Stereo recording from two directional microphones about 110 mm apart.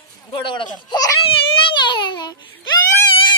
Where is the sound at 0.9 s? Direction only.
35° left (ahead or behind).